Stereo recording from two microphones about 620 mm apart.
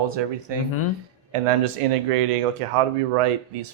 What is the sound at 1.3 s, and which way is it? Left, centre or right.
Speech, right.